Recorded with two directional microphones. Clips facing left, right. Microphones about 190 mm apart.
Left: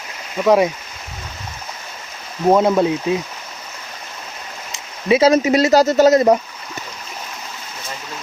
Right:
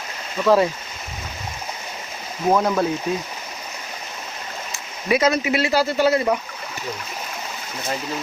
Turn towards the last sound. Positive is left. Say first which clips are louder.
# left 7 dB
turn(degrees=40)  # may be behind; listen again after turning